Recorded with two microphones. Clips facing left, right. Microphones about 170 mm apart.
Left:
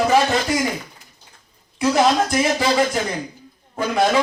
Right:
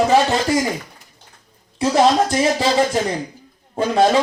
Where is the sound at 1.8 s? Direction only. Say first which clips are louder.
Right 2 dB; 30° right (ahead or behind).